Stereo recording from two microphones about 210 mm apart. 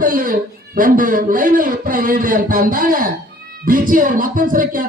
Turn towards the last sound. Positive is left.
turn(degrees=-40)  # may be behind; listen again after turning